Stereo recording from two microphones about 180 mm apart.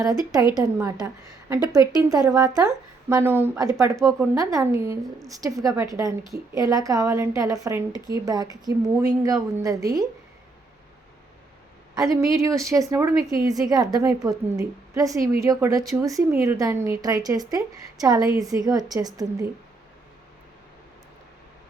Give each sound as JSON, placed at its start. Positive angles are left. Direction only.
{"t": 0.0, "sound": "a woman's voice", "side_deg": -20}
{"t": 11.9, "sound": "a woman's voice", "side_deg": -20}